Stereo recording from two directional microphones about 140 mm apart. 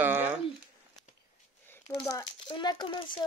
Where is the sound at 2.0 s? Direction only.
30° left (ahead or behind).